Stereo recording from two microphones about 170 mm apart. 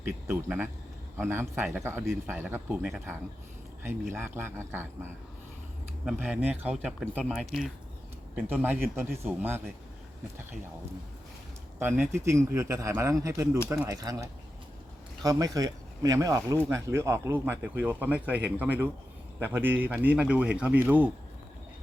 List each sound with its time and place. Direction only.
0.0 s speech: 15° right (ahead or behind)
6.1 s speech: 5° right (ahead or behind)
11.8 s speech: 10° right (ahead or behind)